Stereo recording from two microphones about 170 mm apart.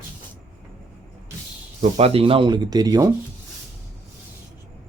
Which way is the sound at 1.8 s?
35° right (ahead or behind).